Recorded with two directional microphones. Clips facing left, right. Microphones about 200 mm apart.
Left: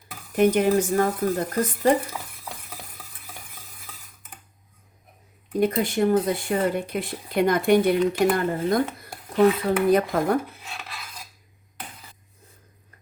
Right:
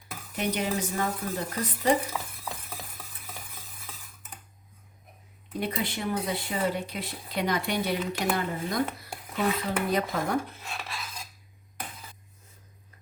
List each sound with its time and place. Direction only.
0.3 s speech: 50° left (ahead or behind)
5.5 s speech: 45° left (ahead or behind)